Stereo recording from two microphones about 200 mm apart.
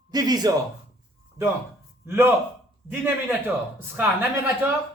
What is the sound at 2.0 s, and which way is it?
Speech, 10° right (ahead or behind).